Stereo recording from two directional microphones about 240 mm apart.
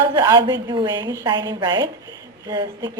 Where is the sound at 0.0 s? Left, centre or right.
Centre.